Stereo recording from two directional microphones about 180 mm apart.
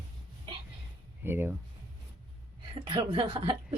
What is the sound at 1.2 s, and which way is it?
Speech, 10° right (ahead or behind).